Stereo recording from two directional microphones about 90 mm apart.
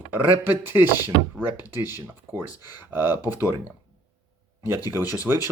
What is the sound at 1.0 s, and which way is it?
Speech, 25° right (ahead or behind).